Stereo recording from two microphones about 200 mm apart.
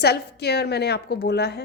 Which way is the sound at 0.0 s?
55° left (ahead or behind).